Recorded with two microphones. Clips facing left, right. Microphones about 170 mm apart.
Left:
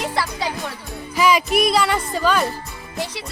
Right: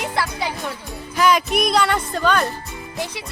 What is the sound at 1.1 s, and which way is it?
Speech, 5° left (ahead or behind).